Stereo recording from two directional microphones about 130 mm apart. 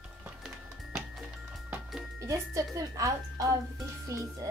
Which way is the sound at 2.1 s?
25° right (ahead or behind).